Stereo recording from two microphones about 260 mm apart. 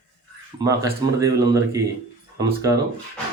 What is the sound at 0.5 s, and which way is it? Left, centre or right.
Speech, centre.